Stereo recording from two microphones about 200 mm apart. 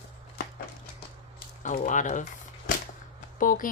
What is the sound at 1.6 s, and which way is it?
Speech, 40° left (ahead or behind).